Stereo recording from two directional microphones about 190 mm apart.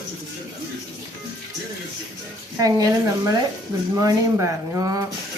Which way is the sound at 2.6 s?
20° right (ahead or behind).